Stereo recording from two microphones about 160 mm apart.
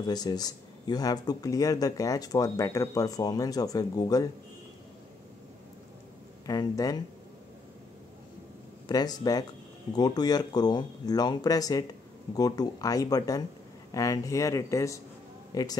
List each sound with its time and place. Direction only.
0.0 s speech: 25° left (ahead or behind)
6.4 s speech: 20° left (ahead or behind)
8.8 s speech: 25° left (ahead or behind)